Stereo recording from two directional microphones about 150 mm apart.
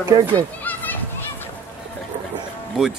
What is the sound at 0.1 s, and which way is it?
Speech, 30° right (ahead or behind).